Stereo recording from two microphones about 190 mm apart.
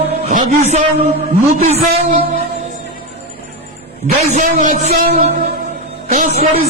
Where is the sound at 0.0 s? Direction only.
35° right (ahead or behind).